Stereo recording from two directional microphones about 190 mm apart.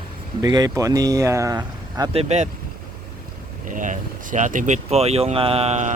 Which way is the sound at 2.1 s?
35° right (ahead or behind).